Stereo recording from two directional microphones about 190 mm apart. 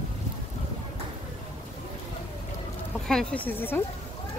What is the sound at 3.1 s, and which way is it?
Speech, 5° left (ahead or behind).